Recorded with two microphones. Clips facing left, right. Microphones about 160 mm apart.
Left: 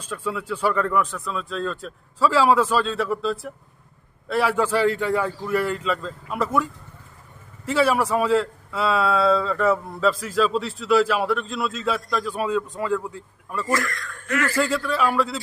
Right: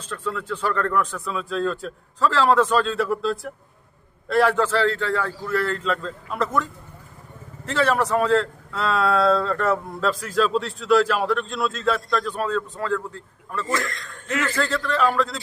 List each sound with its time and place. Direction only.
0.0 s a man's voice: 10° left (ahead or behind)
13.7 s speech: 20° right (ahead or behind)
14.5 s a man's voice: 10° left (ahead or behind)